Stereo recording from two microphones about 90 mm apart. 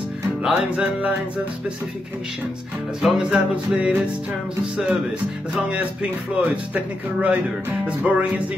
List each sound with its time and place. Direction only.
0.4 s music: 5° right (ahead or behind)
0.7 s speech: 15° right (ahead or behind)
3.0 s speech: centre (ahead or behind)
3.3 s speech: 15° right (ahead or behind)
5.5 s speech: 10° right (ahead or behind)